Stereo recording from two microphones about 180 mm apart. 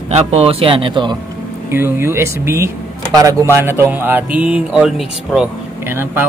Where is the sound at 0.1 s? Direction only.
35° right (ahead or behind).